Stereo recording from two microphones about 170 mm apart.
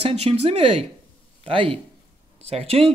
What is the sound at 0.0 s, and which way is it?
A man's voice, 35° right (ahead or behind).